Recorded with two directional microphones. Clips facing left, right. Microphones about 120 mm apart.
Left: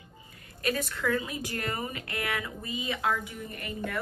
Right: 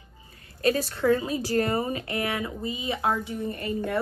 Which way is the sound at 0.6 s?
30° right (ahead or behind).